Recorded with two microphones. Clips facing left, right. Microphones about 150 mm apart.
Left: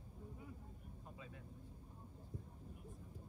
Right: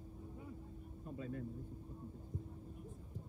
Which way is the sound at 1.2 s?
50° right (ahead or behind).